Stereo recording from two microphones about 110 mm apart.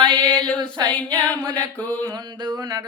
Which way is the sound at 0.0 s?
45° right (ahead or behind).